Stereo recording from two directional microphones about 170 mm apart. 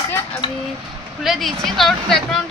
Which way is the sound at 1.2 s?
Centre (ahead or behind).